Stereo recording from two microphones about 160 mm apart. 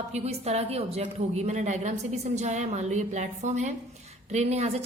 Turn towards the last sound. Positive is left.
turn(degrees=-40)  # may be behind; listen again after turning